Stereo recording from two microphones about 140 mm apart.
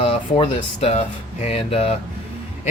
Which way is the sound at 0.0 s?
40° left (ahead or behind).